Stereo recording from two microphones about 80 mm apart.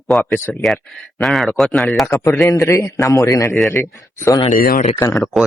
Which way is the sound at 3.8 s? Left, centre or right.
Left.